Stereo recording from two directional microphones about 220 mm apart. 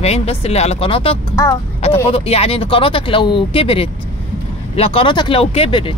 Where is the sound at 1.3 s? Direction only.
15° left (ahead or behind).